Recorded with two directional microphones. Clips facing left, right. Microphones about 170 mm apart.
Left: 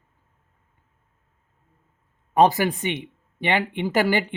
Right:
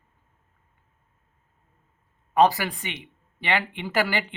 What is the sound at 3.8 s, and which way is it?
Speech, 20° left (ahead or behind).